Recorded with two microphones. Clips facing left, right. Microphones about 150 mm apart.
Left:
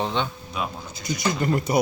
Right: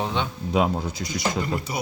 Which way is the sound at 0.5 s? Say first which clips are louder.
Right 10 dB; 90° right.